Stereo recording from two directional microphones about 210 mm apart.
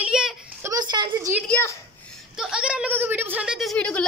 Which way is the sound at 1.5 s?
10° left (ahead or behind).